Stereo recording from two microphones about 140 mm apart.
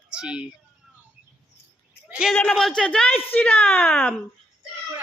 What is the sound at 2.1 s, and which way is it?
A man's voice, 5° right (ahead or behind).